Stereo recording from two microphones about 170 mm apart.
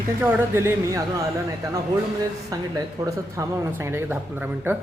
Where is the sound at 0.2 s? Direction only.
15° right (ahead or behind).